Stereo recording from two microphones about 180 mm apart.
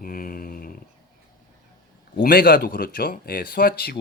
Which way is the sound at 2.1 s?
55° left (ahead or behind).